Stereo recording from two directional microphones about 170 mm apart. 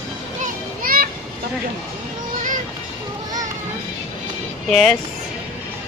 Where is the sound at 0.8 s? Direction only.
55° right (ahead or behind).